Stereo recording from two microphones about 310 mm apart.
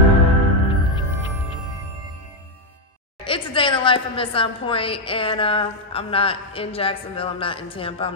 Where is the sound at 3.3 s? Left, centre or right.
Centre.